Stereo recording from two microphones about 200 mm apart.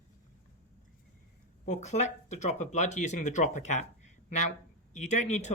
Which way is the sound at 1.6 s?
35° left (ahead or behind).